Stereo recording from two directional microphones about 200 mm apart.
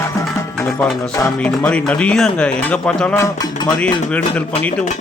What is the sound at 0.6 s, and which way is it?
Speech, centre (ahead or behind).